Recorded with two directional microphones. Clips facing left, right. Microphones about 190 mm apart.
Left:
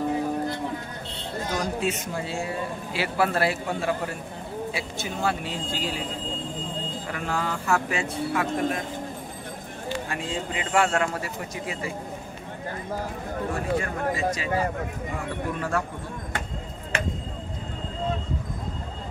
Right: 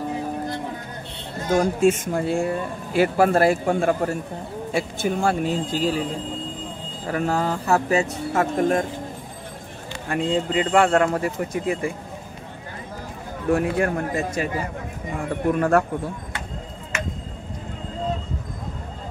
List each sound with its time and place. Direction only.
1.5 s speech: 45° right (ahead or behind)
7.1 s a man's voice: 40° right (ahead or behind)
10.0 s speech: 55° right (ahead or behind)
13.6 s a man's voice: 60° right (ahead or behind)